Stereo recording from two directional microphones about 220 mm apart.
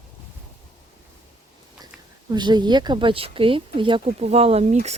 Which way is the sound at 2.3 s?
20° right (ahead or behind).